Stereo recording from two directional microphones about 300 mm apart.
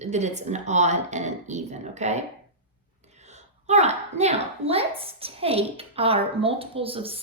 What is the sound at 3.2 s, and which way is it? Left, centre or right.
A woman's voice, right.